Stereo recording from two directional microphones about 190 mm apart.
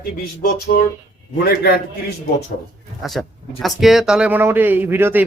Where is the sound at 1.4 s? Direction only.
55° left (ahead or behind).